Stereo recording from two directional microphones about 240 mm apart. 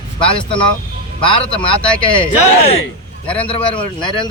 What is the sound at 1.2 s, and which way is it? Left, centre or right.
A man's voice, left.